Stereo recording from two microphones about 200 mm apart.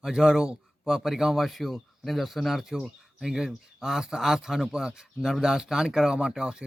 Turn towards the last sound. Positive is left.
turn(degrees=-5)  # may be behind; listen again after turning